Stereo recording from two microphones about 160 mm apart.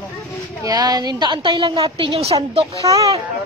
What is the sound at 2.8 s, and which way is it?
Speech, 20° right (ahead or behind).